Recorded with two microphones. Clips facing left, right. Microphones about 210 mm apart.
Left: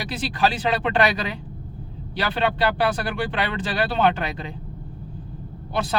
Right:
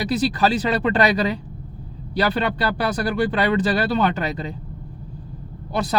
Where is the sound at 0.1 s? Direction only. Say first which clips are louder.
Right 3 dB; 40° right (ahead or behind).